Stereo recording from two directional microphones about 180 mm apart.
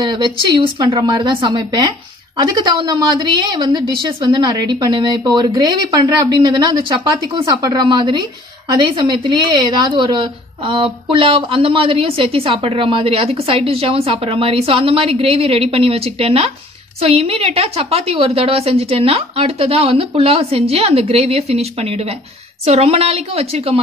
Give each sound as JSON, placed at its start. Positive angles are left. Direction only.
{"t": 0.0, "sound": "a woman's voice", "side_deg": -25}